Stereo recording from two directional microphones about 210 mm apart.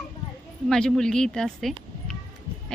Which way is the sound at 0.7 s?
Centre (ahead or behind).